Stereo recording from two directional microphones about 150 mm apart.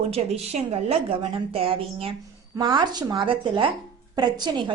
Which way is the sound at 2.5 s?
30° right (ahead or behind).